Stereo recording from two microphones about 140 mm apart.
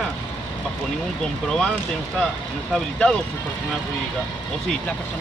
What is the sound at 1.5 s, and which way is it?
Speech, 5° left (ahead or behind).